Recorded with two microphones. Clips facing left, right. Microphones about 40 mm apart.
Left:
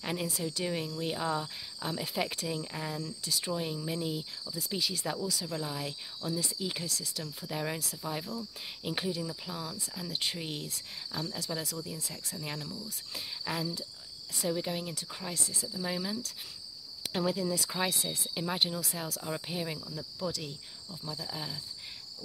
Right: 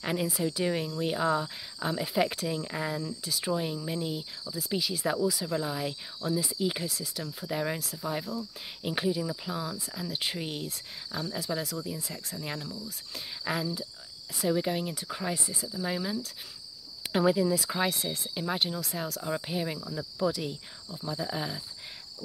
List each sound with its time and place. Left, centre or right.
0.0 s speech: centre
15.2 s cricket: centre
15.8 s speech: centre
17.1 s cricket: centre
17.5 s speech: centre
19.9 s cricket: right
20.2 s speech: centre
21.0 s cricket: right